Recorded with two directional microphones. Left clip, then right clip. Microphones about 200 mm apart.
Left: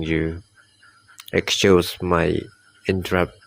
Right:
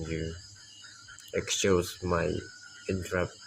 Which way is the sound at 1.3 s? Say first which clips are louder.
Left 11 dB; 40° left (ahead or behind).